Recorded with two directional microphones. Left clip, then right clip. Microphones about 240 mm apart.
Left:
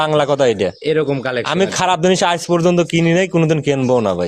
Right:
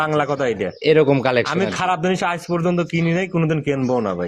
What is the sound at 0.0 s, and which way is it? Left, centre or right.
Speech, left.